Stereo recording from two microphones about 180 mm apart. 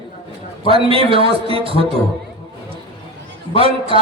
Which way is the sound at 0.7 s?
30° right (ahead or behind).